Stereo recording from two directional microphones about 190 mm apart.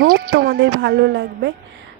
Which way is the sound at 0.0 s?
55° right (ahead or behind).